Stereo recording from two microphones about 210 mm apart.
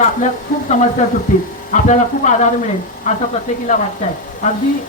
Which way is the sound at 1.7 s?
35° left (ahead or behind).